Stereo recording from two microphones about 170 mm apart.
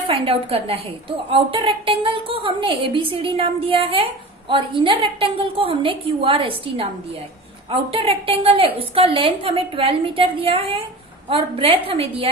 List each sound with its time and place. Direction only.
0.1 s a woman's voice: 35° right (ahead or behind)